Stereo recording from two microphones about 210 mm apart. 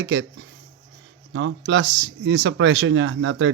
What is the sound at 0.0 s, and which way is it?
A man's voice, 55° right (ahead or behind).